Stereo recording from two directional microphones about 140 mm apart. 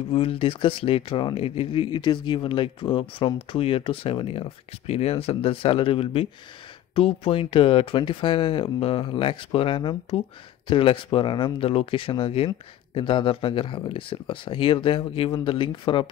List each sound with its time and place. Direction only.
0.1 s speech: 40° left (ahead or behind)